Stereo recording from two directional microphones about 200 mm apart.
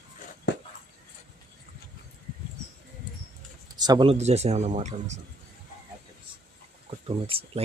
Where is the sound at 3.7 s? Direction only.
20° right (ahead or behind); by 5.2 s 35° right (ahead or behind).